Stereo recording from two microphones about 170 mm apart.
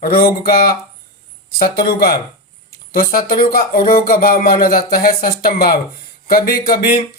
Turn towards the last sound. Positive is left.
turn(degrees=60)  # may be behind; listen again after turning